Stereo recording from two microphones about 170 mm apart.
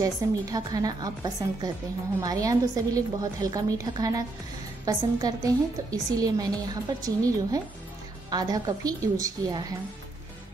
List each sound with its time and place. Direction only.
0.0 s a woman's voice: 20° right (ahead or behind)
8.3 s a woman's voice: 25° right (ahead or behind)